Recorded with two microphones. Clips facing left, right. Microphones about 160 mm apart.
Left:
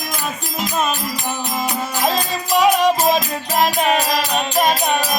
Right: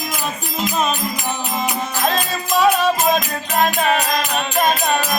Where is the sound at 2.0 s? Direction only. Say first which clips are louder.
Left 1 dB; 15° left (ahead or behind).